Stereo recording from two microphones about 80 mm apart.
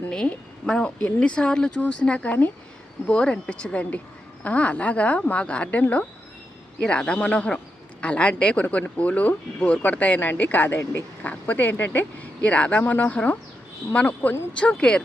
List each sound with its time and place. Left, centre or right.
0.1 s a woman's voice: centre